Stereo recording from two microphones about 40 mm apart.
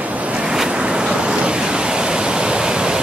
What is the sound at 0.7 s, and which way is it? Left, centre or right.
Pink noise, right.